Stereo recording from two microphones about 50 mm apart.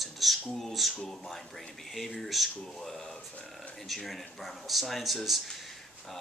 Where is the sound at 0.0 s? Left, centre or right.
Centre.